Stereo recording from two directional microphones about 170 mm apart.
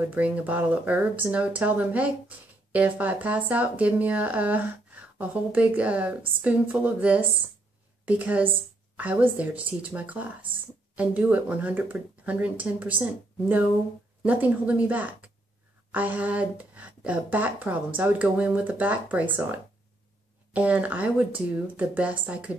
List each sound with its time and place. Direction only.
0.0 s speech: 10° right (ahead or behind)
14.2 s speech: 10° right (ahead or behind)